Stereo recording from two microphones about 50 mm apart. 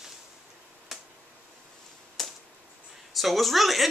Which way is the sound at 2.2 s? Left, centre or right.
Centre.